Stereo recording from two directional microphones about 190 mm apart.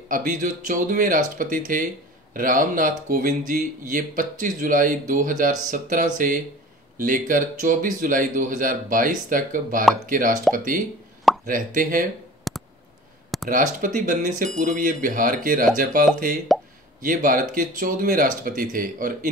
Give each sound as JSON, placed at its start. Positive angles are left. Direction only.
{"t": 0.1, "sound": "speech", "side_deg": -45}
{"t": 12.5, "sound": "clicking", "side_deg": 0}
{"t": 13.5, "sound": "speech", "side_deg": -45}